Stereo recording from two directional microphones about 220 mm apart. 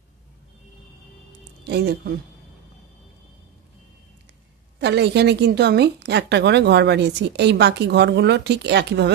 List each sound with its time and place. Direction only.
1.6 s speech: 50° right (ahead or behind)
4.7 s a woman's voice: 50° right (ahead or behind)